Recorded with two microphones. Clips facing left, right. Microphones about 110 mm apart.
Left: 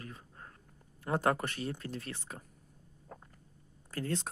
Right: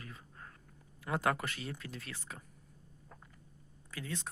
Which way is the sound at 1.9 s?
50° left (ahead or behind).